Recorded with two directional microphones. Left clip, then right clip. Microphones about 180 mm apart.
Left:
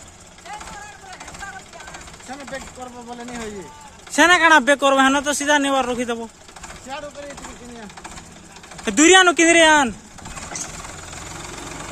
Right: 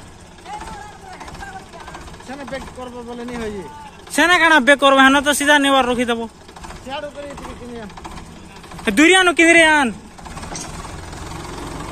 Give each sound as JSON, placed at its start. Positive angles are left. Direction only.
{"t": 3.3, "sound": "speech", "side_deg": 75}
{"t": 4.1, "sound": "speech", "side_deg": 10}
{"t": 6.9, "sound": "speech", "side_deg": 90}
{"t": 8.8, "sound": "speech", "side_deg": 20}
{"t": 10.6, "sound": "vehicle", "side_deg": 10}